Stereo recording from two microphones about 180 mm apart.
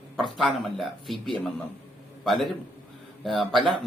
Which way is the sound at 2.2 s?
Centre (ahead or behind).